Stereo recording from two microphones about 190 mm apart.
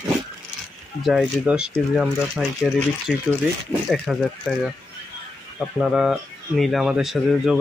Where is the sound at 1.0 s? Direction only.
5° right (ahead or behind).